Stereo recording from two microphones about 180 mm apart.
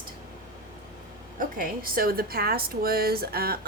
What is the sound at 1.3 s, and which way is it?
A woman's voice, 55° right (ahead or behind).